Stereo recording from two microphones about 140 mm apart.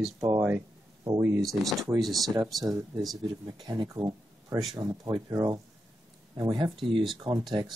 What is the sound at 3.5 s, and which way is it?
Speech, 30° right (ahead or behind).